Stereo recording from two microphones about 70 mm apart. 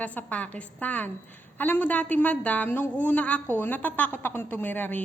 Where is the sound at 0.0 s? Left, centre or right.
Left.